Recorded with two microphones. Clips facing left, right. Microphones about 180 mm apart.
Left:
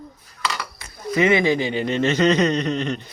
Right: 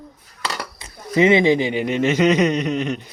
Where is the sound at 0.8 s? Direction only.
20° right (ahead or behind).